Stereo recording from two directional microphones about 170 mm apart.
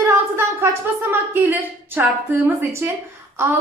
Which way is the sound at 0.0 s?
15° right (ahead or behind).